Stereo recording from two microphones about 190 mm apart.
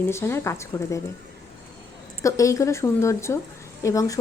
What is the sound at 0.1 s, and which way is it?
Speech, 15° left (ahead or behind).